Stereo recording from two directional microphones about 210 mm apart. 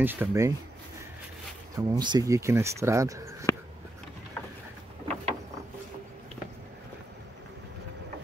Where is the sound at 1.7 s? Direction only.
20° right (ahead or behind).